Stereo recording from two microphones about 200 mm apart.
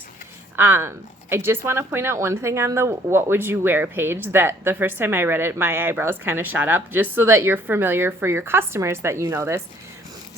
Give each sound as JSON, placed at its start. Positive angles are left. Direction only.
{"t": 0.5, "sound": "speech", "side_deg": -10}